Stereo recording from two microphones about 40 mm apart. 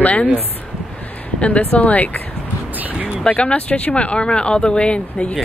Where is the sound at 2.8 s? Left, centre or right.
Right.